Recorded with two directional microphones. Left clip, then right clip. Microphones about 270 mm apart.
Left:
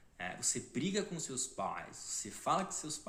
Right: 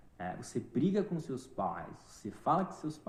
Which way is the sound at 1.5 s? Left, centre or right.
Left.